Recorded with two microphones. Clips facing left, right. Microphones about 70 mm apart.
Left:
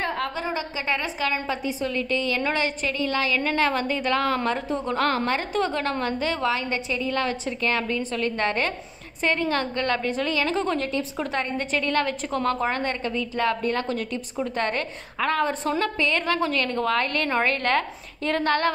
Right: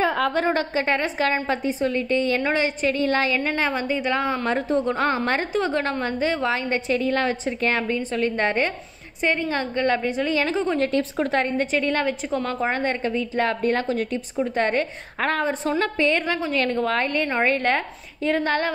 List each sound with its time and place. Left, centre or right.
0.3 s a woman's voice: right
2.9 s a woman's voice: right; by 4.4 s centre
4.5 s a woman's voice: right
5.2 s a woman's voice: right; by 10.8 s centre
10.8 s a woman's voice: right
15.1 s a woman's voice: right
16.2 s a woman's voice: centre
17.1 s a woman's voice: centre